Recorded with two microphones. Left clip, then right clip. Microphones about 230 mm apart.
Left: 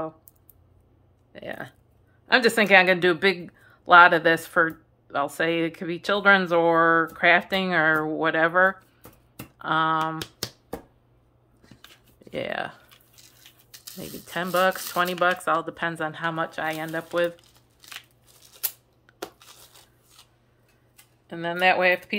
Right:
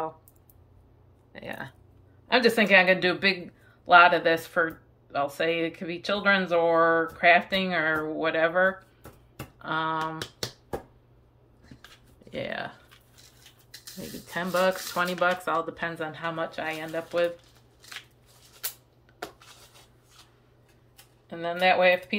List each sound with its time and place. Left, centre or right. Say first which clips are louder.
1.3 s speech: left 2 dB; centre
12.3 s speech: left 4 dB; centre
13.9 s speech: left 2 dB; centre
19.2 s a sound: left 1 dB; left
21.3 s speech: left 2 dB; centre